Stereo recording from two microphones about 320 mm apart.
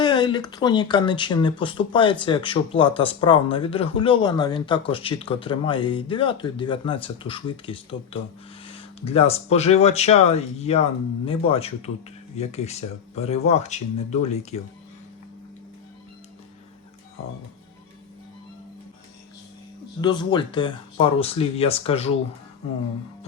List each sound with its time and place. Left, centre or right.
0.0 s speech: centre
20.0 s speech: centre